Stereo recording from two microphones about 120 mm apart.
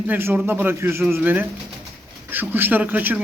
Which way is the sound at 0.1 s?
15° right (ahead or behind).